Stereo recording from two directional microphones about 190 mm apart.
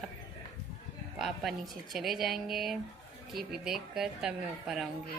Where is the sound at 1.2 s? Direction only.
Centre (ahead or behind).